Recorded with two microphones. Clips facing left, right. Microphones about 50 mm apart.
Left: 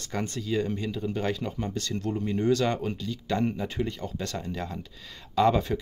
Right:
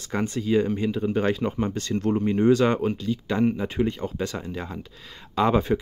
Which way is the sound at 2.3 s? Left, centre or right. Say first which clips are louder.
Right 5 dB; right.